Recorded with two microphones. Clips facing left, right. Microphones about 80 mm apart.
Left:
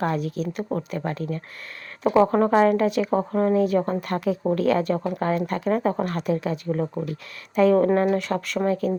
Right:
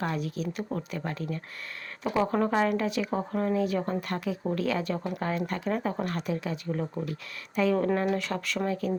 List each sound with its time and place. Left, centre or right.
0.0 s speech: left
0.7 s speech: left
0.9 s speech: left